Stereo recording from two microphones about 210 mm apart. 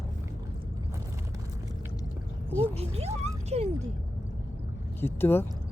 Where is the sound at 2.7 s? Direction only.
30° right (ahead or behind).